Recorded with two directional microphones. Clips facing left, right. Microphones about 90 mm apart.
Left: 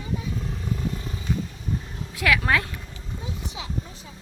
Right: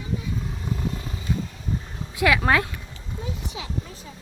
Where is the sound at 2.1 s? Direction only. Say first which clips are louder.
Right 2 dB; 20° right (ahead or behind).